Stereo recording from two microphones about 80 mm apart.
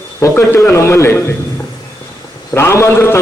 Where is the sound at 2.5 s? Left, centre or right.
Left.